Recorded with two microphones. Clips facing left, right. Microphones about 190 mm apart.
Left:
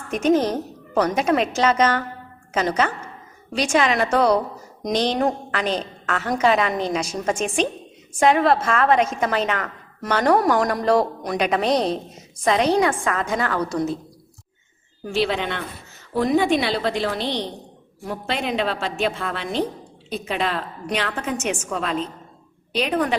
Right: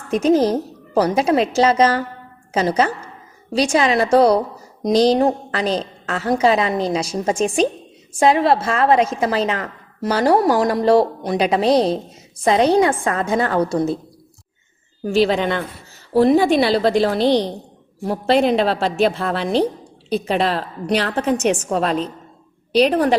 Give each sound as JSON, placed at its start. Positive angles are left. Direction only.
{"t": 0.1, "sound": "a woman's voice", "side_deg": -35}
{"t": 15.1, "sound": "a woman's voice", "side_deg": -40}